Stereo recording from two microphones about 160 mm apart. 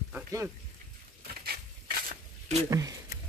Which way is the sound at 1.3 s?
70° right (ahead or behind).